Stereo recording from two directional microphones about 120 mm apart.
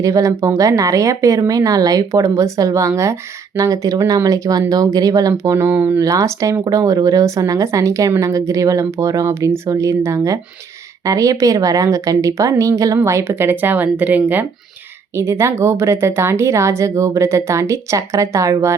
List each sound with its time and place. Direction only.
0.0 s speech: 30° right (ahead or behind)
6.0 s speech: 25° right (ahead or behind)